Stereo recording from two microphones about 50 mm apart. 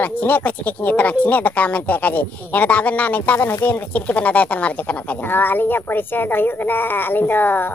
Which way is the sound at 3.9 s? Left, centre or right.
Left.